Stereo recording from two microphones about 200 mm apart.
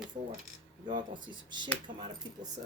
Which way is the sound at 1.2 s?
20° right (ahead or behind).